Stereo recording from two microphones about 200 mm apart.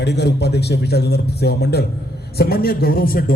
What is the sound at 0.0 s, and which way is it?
A man's voice, 60° left (ahead or behind).